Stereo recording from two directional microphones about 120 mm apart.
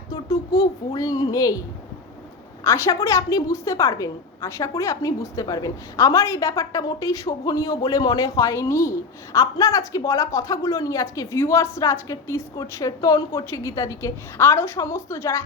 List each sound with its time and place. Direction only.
0.1 s speech: 30° left (ahead or behind)
2.6 s a woman's voice: 25° left (ahead or behind)